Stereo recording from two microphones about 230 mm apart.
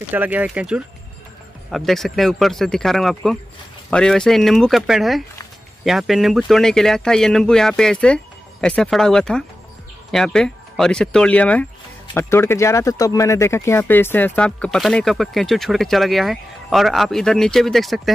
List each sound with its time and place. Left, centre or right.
0.1 s speech: centre